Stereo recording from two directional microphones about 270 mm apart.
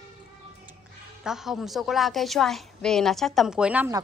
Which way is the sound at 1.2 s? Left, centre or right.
Centre.